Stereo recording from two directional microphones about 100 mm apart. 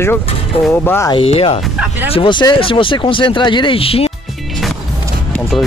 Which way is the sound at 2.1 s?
55° left (ahead or behind).